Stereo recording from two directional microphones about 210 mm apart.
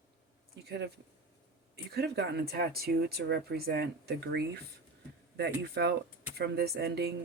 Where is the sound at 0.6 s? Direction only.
55° right (ahead or behind).